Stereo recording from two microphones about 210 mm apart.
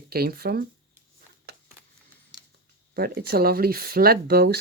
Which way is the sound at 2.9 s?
45° right (ahead or behind).